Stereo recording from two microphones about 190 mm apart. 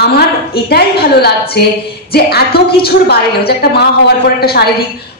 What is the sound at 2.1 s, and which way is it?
A man's voice, 55° left (ahead or behind).